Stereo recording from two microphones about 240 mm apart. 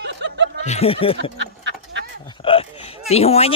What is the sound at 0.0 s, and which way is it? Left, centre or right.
Snicker, right.